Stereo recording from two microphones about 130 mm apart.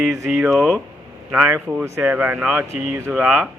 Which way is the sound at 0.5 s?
Centre (ahead or behind).